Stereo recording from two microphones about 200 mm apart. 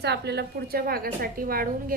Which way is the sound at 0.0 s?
55° right (ahead or behind).